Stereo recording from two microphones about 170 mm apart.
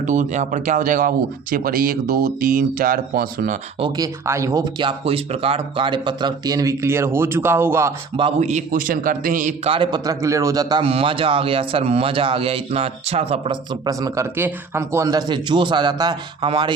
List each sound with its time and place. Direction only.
0.0 s speech: 45° right (ahead or behind)
3.8 s speech: 25° right (ahead or behind)
8.1 s speech: 35° right (ahead or behind)
9.7 s a man's voice: 25° right (ahead or behind)
13.8 s speech: 20° right (ahead or behind)